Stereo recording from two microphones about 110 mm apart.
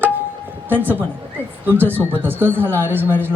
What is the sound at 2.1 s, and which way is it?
A man's voice, 20° right (ahead or behind).